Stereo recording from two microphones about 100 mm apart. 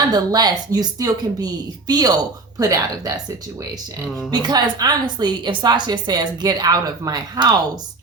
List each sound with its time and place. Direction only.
0.1 s speech: 45° right (ahead or behind)
4.3 s a woman's voice: 45° right (ahead or behind)